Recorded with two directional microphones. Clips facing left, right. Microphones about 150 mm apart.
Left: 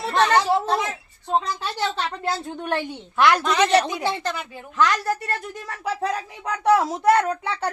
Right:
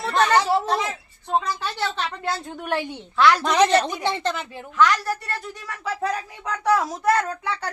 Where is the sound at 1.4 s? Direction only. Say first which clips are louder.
Even; 25° left (ahead or behind).